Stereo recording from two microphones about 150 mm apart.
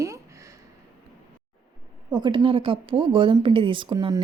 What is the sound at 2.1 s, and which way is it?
A woman's voice, 30° right (ahead or behind).